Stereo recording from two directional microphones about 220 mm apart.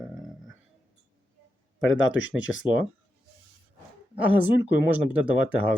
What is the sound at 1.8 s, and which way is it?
Speech, 60° left (ahead or behind).